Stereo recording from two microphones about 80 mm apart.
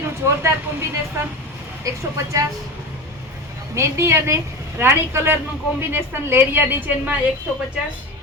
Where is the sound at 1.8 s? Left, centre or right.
Right.